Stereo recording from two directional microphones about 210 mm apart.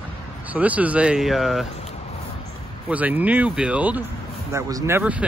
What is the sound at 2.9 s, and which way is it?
Speech, 5° right (ahead or behind).